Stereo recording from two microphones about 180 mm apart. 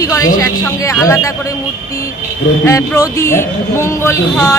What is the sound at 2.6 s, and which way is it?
Speech, 15° left (ahead or behind).